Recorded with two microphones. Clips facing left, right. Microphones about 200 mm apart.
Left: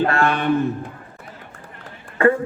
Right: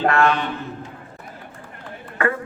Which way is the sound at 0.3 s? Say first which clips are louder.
Left 4 dB; 55° left (ahead or behind).